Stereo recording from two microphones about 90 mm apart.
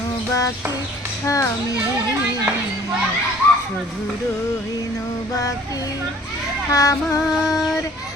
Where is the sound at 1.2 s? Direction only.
35° left (ahead or behind).